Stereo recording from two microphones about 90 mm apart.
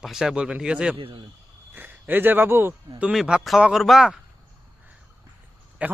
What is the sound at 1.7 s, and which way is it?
Speech, 20° right (ahead or behind).